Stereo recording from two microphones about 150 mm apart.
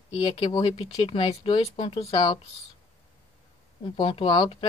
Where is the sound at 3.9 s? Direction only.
35° left (ahead or behind).